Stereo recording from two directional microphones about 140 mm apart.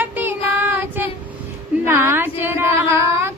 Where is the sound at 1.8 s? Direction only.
15° right (ahead or behind).